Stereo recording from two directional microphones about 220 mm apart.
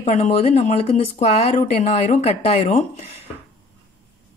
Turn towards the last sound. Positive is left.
turn(degrees=30)  # may be behind; listen again after turning